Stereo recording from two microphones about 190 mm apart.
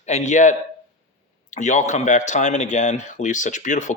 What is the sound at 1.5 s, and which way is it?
Speech, 40° left (ahead or behind).